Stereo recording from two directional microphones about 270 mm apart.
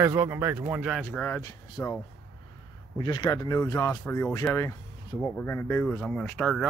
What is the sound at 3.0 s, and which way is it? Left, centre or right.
Speech, centre.